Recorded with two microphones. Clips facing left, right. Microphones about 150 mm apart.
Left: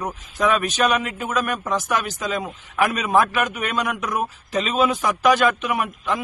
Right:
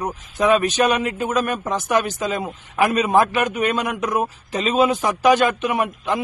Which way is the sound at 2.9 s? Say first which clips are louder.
Right 4 dB; 35° right (ahead or behind).